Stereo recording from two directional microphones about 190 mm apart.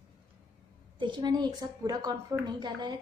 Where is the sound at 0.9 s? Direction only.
25° right (ahead or behind).